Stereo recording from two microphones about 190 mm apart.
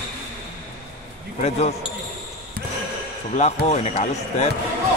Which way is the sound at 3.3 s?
35° left (ahead or behind).